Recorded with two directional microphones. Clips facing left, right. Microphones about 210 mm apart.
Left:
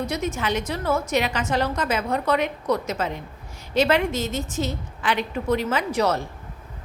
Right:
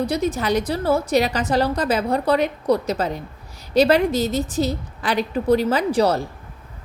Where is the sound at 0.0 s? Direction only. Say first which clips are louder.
Right 5 dB; 35° right (ahead or behind).